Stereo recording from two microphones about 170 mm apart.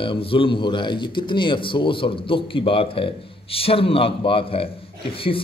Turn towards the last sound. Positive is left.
turn(degrees=30)  # may be behind; listen again after turning